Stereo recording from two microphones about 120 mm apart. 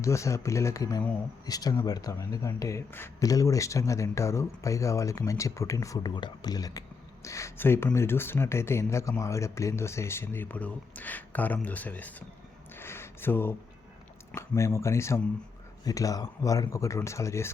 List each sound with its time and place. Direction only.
0.0 s speech: 25° left (ahead or behind)
12.7 s a sound: 20° left (ahead or behind)
14.3 s speech: 25° left (ahead or behind)